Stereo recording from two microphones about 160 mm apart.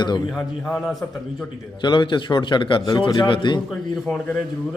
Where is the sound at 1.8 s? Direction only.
30° left (ahead or behind).